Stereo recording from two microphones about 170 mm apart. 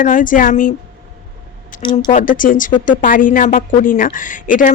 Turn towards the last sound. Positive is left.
turn(degrees=50)  # may be behind; listen again after turning